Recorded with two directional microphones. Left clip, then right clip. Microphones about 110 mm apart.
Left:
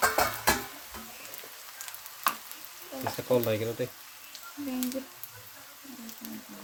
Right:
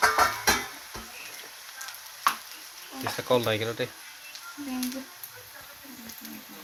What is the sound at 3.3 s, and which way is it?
Speech, 15° left (ahead or behind).